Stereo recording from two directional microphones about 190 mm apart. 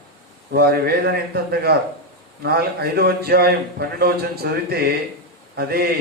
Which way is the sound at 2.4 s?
55° right (ahead or behind).